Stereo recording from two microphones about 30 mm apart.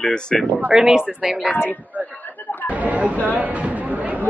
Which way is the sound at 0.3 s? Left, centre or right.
Centre.